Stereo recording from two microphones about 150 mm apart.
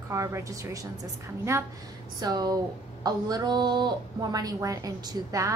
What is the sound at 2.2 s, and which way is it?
A woman's voice, 25° right (ahead or behind).